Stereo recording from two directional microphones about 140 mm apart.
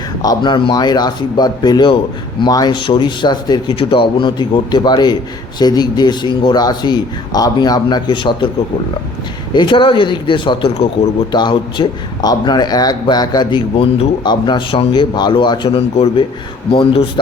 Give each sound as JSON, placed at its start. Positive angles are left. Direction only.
{"t": 0.2, "sound": "speech", "side_deg": 30}
{"t": 9.5, "sound": "speech", "side_deg": 35}